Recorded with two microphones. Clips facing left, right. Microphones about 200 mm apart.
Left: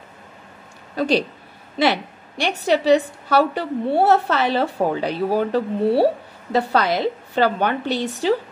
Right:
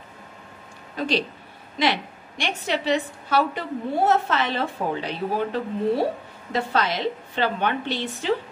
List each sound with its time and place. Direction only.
0.9 s a woman's voice: 40° left (ahead or behind)